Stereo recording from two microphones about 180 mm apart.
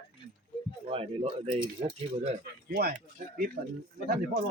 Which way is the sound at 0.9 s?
30° right (ahead or behind).